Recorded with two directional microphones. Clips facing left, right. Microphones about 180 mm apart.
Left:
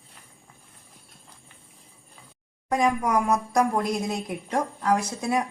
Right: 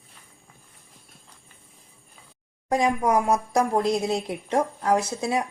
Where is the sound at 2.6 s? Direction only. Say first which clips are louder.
Right 1 dB; 30° right (ahead or behind).